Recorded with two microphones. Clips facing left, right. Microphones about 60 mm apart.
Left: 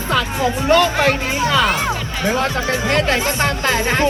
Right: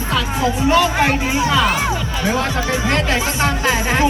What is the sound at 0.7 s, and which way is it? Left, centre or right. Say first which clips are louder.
Speech: left 3 dB; centre.